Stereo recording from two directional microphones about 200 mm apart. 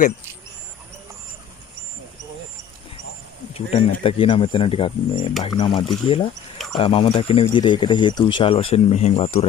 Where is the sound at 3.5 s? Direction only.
30° left (ahead or behind).